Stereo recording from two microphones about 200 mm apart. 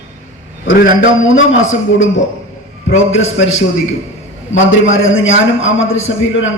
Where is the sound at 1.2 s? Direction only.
75° left (ahead or behind).